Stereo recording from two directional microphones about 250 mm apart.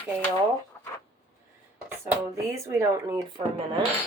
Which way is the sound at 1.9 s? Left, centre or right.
Centre.